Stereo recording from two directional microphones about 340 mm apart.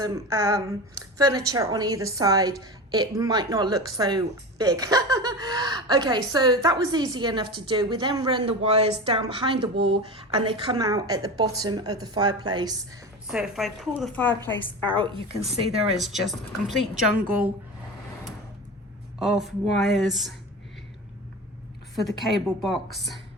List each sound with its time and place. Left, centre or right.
0.0 s a woman's voice: centre
14.8 s speech: centre
16.0 s a woman's voice: centre
19.2 s a woman's voice: centre
22.2 s a woman's voice: centre